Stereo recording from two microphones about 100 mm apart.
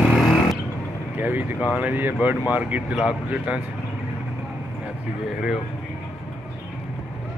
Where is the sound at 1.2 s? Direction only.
20° right (ahead or behind).